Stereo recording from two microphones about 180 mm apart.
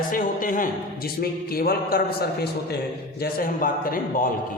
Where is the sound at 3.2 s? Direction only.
55° left (ahead or behind).